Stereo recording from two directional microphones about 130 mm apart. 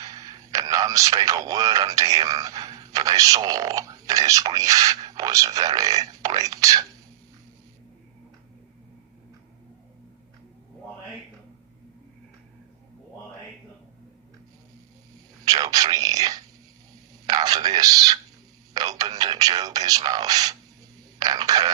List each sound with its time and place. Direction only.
0.0 s speech: 25° right (ahead or behind)
15.4 s whispering: 30° right (ahead or behind)
17.2 s a sound: 30° right (ahead or behind)